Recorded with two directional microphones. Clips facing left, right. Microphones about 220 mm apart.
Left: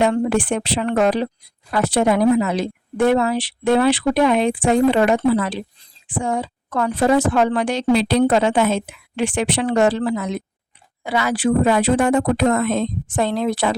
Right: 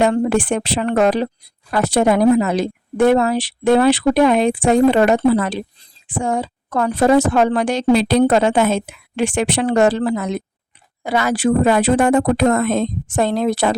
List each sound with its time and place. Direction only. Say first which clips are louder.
0.0 s a woman's voice: right 2 dB; 45° right (ahead or behind)